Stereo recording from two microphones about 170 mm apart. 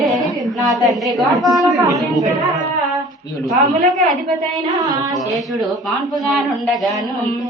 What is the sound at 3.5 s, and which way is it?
Speech, 45° right (ahead or behind).